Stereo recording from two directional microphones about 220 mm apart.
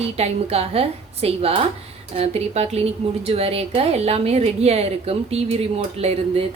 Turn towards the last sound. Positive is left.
turn(degrees=-25)  # may be behind; listen again after turning